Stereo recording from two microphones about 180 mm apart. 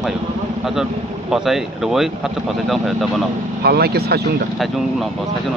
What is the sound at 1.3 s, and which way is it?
Speech, centre (ahead or behind).